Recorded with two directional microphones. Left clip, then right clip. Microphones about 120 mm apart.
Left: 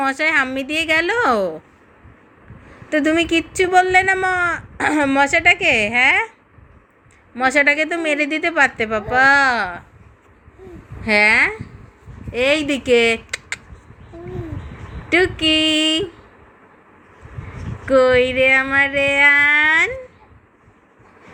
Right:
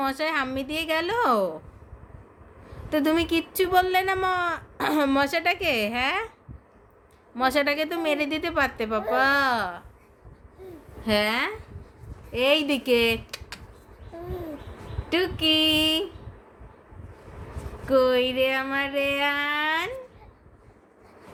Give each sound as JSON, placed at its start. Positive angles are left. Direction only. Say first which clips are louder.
{"t": 0.0, "sound": "a woman's voice", "louder": "left 9 dB", "side_deg": 5}
{"t": 2.9, "sound": "speech", "louder": "left 7 dB", "side_deg": -15}
{"t": 7.3, "sound": "a woman's voice", "louder": "left 8 dB", "side_deg": -10}
{"t": 11.0, "sound": "a woman's voice", "louder": "left 10 dB", "side_deg": 10}
{"t": 15.1, "sound": "a sound", "louder": "left 7 dB", "side_deg": 20}
{"t": 17.8, "sound": "a sound", "louder": "left 7 dB", "side_deg": 25}